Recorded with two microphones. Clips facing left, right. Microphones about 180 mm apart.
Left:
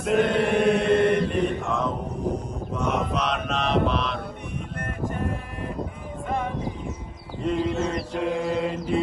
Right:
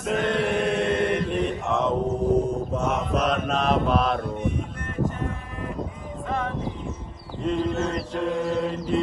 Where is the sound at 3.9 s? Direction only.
50° right (ahead or behind).